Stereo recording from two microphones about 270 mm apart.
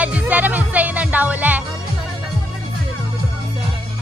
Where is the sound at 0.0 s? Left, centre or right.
Centre.